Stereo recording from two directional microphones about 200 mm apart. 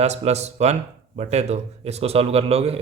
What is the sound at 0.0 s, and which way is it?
Speech, 35° right (ahead or behind).